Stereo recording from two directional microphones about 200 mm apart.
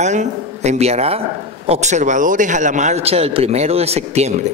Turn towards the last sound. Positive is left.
turn(degrees=-35)  # may be behind; listen again after turning